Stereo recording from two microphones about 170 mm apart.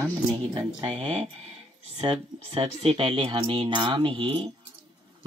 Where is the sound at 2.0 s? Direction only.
30° right (ahead or behind).